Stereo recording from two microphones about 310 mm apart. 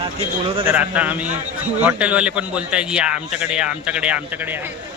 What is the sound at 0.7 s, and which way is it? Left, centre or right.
A man's voice, centre.